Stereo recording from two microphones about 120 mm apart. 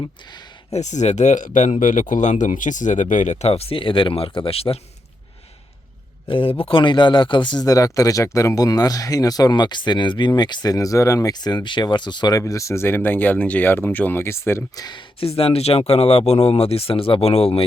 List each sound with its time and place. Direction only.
0.0 s speech: 35° left (ahead or behind)
0.7 s speech: 75° left (ahead or behind); by 4.8 s 55° left (ahead or behind)
6.2 s a man's voice: 45° left (ahead or behind)
12.4 s speech: 25° left (ahead or behind)
14.8 s speech: 40° left (ahead or behind)
15.3 s speech: 55° left (ahead or behind)